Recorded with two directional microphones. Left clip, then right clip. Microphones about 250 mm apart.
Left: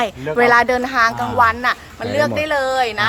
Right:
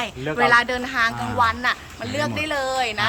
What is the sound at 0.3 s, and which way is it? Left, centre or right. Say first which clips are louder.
A woman's voice: left 5 dB; left.